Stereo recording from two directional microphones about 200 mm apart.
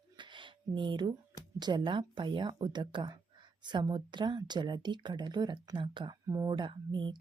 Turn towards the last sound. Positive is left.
turn(degrees=-25)  # may be behind; listen again after turning